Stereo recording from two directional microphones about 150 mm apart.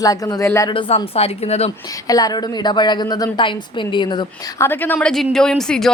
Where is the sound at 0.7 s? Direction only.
35° left (ahead or behind).